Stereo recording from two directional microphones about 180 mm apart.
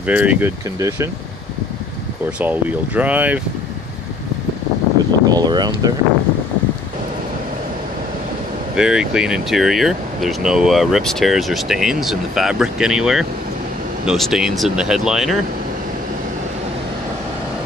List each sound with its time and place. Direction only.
0.0 s speech: 10° right (ahead or behind)
2.4 s speech: 10° right (ahead or behind)
5.2 s speech: 20° right (ahead or behind)
8.7 s speech: 5° right (ahead or behind)